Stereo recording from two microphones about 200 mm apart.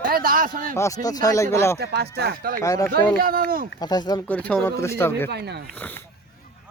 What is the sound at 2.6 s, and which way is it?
Speech, 15° left (ahead or behind).